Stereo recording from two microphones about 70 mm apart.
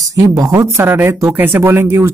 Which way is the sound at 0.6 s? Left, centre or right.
Right.